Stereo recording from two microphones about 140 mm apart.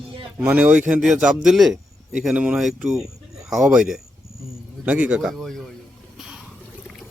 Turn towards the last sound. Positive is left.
turn(degrees=-5)  # may be behind; listen again after turning